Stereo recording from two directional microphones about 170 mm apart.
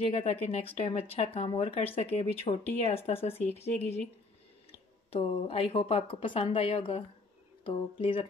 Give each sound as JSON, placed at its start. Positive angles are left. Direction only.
{"t": 0.0, "sound": "speech", "side_deg": 35}